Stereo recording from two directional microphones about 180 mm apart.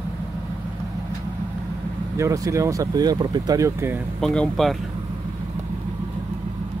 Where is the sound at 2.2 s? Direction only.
15° right (ahead or behind).